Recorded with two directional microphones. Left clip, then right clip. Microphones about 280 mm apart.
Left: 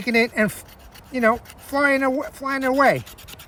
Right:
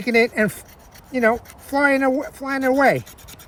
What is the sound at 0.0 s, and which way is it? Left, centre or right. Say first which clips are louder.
Speech: right 2 dB; centre.